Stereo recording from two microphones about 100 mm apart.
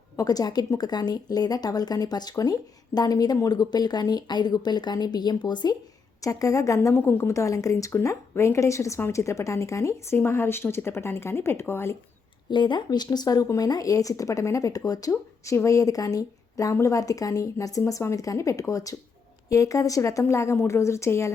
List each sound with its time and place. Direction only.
0.2 s speech: 40° left (ahead or behind)
6.2 s a woman's voice: 35° left (ahead or behind)
12.5 s a woman's voice: 50° left (ahead or behind); by 21.3 s 30° left (ahead or behind)